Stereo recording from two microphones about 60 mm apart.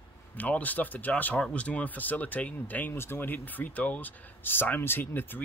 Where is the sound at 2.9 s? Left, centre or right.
Left.